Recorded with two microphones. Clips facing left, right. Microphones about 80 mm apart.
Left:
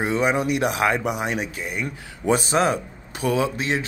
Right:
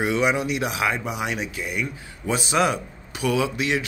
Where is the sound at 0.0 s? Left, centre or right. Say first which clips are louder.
Left 1 dB; left.